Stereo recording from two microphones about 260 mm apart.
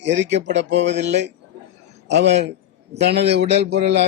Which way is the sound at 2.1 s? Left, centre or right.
Right.